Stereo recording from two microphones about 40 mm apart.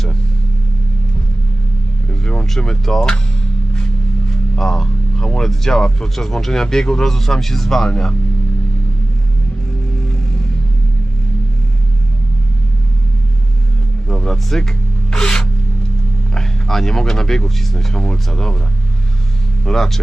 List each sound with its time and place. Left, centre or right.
2.0 s vehicle: centre
2.6 s speech: centre
4.3 s speech: centre
14.1 s vehicle: centre
15.1 s rub: centre
16.3 s speech: centre
19.6 s speech: centre